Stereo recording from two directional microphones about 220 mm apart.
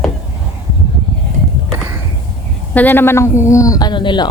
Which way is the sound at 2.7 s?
10° left (ahead or behind).